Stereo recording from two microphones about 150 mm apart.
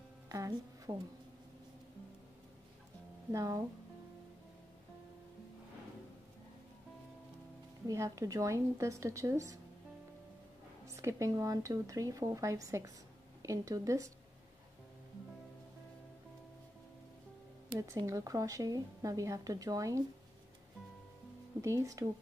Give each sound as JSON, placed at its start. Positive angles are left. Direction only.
{"t": 0.3, "sound": "music", "side_deg": -20}
{"t": 3.3, "sound": "a woman's voice", "side_deg": -20}
{"t": 7.8, "sound": "a woman's voice", "side_deg": -20}
{"t": 10.9, "sound": "a woman's voice", "side_deg": -20}
{"t": 17.7, "sound": "a woman's voice", "side_deg": -20}
{"t": 21.5, "sound": "a woman's voice", "side_deg": -20}